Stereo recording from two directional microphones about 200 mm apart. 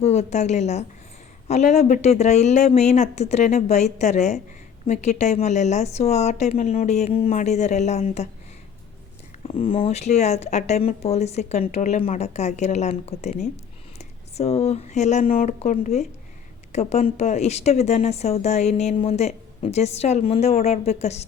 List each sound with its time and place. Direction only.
0.0 s speech: 35° left (ahead or behind)
9.5 s speech: 30° left (ahead or behind)